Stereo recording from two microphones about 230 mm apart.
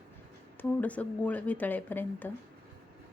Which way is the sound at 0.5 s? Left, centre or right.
Centre.